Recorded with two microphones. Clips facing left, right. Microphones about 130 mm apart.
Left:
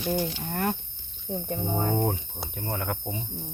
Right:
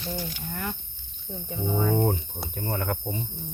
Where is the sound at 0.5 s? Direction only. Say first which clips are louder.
Left 6 dB; 60° left (ahead or behind).